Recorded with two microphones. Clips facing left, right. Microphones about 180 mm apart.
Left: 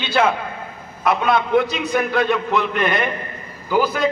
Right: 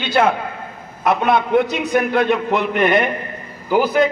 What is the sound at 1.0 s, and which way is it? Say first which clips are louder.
A man's voice: right 2 dB; 55° right (ahead or behind).